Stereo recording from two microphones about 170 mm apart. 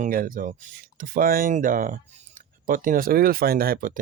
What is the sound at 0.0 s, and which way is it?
Speech, 55° right (ahead or behind).